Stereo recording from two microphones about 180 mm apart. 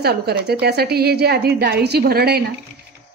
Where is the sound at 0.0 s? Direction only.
65° right (ahead or behind).